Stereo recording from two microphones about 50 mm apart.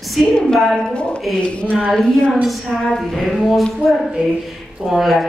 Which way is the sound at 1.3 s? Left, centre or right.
Left.